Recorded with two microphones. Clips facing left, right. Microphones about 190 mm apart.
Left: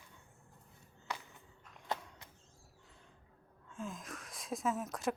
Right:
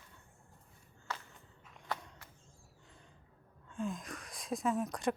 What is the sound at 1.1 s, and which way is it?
Walk, 15° left (ahead or behind).